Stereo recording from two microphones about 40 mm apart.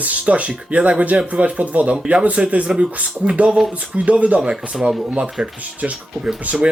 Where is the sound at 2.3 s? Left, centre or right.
Right.